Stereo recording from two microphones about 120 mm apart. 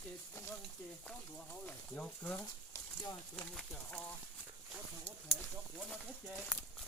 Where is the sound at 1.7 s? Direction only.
10° left (ahead or behind).